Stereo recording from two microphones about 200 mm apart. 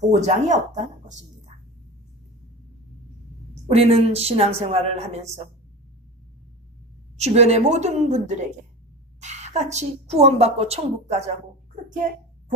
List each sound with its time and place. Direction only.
0.1 s a woman's voice: 35° right (ahead or behind)
3.7 s a woman's voice: 30° right (ahead or behind)
7.2 s a woman's voice: 30° right (ahead or behind)